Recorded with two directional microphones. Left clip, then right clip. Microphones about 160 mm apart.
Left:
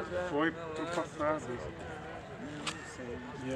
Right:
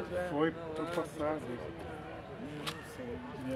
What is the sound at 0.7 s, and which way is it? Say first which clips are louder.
Speech: left 1 dB; 15° left (ahead or behind).